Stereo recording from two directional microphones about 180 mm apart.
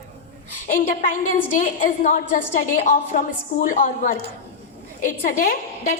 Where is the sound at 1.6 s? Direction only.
45° left (ahead or behind).